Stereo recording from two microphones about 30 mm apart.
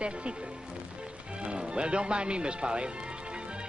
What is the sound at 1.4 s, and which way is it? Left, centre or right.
Speech, right.